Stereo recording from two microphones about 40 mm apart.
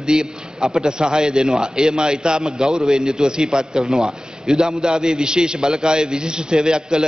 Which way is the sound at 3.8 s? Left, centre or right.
Centre.